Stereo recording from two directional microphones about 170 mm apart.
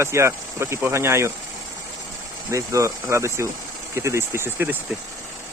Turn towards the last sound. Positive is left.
turn(degrees=-10)  # may be behind; listen again after turning